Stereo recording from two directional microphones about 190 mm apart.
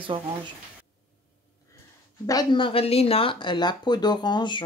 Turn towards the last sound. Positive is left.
turn(degrees=25)  # may be behind; listen again after turning